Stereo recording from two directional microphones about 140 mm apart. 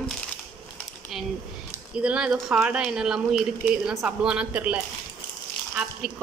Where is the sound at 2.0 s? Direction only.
5° right (ahead or behind).